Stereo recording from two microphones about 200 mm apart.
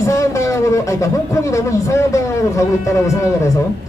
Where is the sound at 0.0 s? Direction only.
15° left (ahead or behind).